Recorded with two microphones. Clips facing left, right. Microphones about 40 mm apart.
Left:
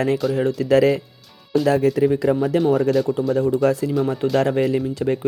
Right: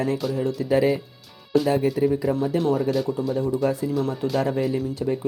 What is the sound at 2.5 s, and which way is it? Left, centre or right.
Speech, left.